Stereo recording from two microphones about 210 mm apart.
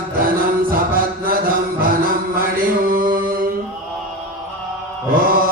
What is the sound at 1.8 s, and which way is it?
Music, 45° right (ahead or behind).